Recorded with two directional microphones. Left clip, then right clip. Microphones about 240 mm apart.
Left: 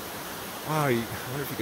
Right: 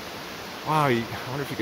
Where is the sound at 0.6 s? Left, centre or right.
Centre.